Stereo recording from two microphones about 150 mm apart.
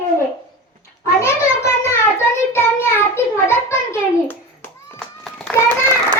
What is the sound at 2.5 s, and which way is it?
Child singing, 15° left (ahead or behind).